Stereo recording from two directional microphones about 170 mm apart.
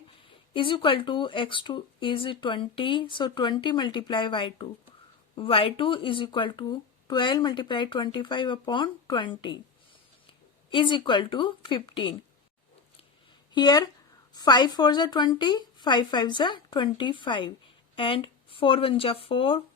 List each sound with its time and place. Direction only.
0.5 s speech: 30° left (ahead or behind)
10.7 s speech: 30° left (ahead or behind)
13.5 s speech: 25° left (ahead or behind)